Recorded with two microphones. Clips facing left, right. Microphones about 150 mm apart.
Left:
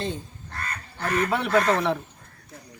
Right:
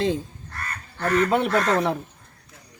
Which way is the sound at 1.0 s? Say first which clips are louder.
Right 4 dB; 45° right (ahead or behind).